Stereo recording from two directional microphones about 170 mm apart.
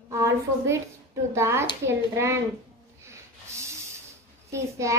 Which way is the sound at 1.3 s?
15° right (ahead or behind).